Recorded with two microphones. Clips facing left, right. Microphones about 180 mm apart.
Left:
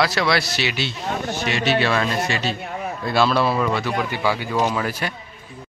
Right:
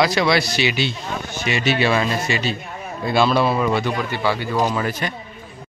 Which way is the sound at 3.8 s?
10° left (ahead or behind).